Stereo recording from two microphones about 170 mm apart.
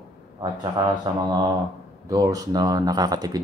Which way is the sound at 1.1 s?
25° right (ahead or behind).